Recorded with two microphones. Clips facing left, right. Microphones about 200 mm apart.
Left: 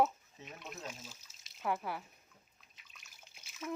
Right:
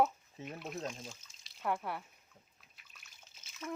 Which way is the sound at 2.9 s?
Centre (ahead or behind).